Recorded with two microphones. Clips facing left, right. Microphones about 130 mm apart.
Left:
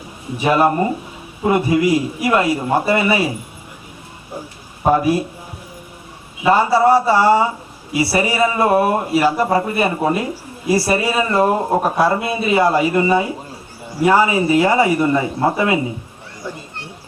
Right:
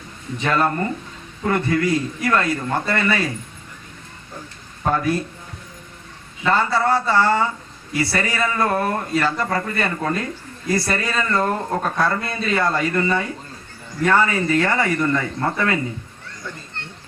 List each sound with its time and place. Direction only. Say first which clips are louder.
0.3 s speech: left 5 dB; 15° left (ahead or behind)
4.8 s speech: left 6 dB; 15° left (ahead or behind)
6.4 s speech: left 6 dB; 10° left (ahead or behind)
16.5 s children playing: left 5 dB; 10° left (ahead or behind)